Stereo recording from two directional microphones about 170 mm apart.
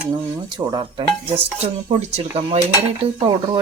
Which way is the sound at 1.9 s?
40° right (ahead or behind).